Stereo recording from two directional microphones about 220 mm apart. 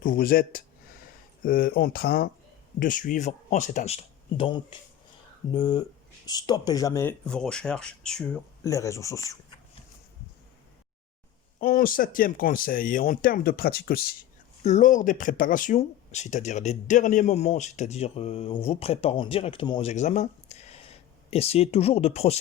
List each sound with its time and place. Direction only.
0.0 s speech: 40° left (ahead or behind); by 8.4 s 5° left (ahead or behind)
8.6 s speech: 15° left (ahead or behind)
11.6 s speech: 40° left (ahead or behind)